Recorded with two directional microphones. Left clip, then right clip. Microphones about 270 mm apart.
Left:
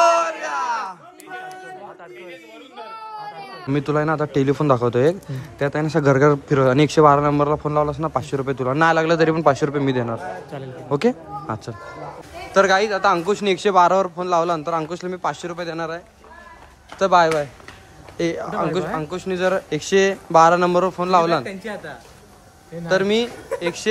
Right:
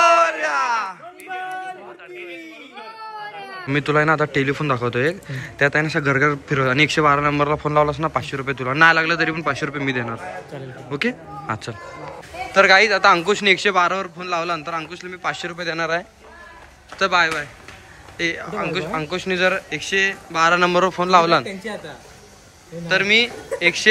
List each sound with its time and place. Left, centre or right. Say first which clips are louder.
0.0 s a sound: right 2 dB; centre
3.6 s a man's voice: right 3 dB; centre
17.0 s a man's voice: left 2 dB; centre
22.8 s a man's voice: right 2 dB; centre